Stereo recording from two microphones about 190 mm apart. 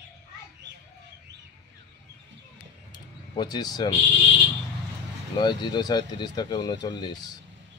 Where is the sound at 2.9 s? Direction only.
20° left (ahead or behind).